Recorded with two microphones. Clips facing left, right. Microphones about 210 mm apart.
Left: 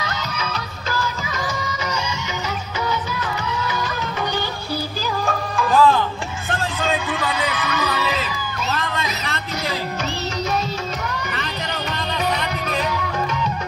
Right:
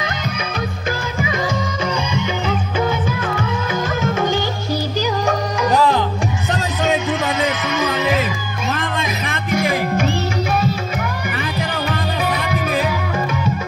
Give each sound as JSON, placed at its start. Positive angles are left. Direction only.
{"t": 0.9, "sound": "music", "side_deg": -50}
{"t": 2.9, "sound": "music", "side_deg": -50}
{"t": 5.2, "sound": "music", "side_deg": -20}
{"t": 9.5, "sound": "music", "side_deg": -50}
{"t": 11.9, "sound": "music", "side_deg": -5}